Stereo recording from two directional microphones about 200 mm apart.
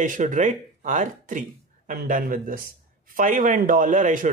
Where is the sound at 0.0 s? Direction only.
40° right (ahead or behind).